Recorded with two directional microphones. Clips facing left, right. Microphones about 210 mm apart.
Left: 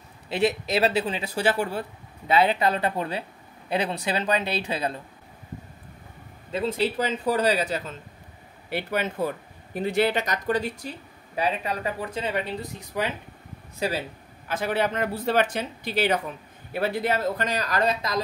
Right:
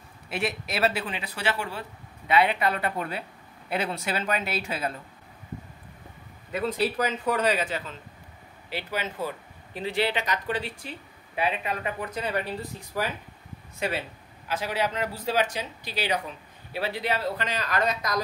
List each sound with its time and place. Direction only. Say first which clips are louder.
0.9 s speech: left 6 dB; 25° left (ahead or behind)
1.3 s speech: left 6 dB; 40° left (ahead or behind)
2.2 s speech: left 2 dB; 30° left (ahead or behind)
4.6 s speech: left 3 dB; 20° left (ahead or behind)
6.5 s speech: left 2 dB; 25° left (ahead or behind)
8.6 s speech: left 5 dB; 55° left (ahead or behind); by 13.1 s 20° left (ahead or behind)
13.7 s speech: left 2 dB; 35° left (ahead or behind)
14.5 s speech: left 3 dB; 55° left (ahead or behind); by 18.2 s 30° left (ahead or behind)